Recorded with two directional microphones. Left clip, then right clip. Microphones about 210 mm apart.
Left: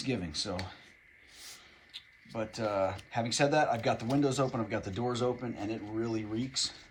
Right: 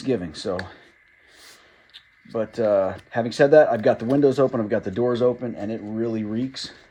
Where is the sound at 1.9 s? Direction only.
45° right (ahead or behind).